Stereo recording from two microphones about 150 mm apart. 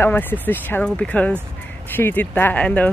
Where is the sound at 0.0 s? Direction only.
10° left (ahead or behind).